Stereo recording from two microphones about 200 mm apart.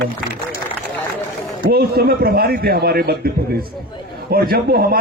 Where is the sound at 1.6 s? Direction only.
50° right (ahead or behind).